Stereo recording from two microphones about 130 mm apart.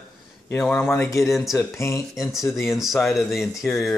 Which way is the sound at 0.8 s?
20° left (ahead or behind).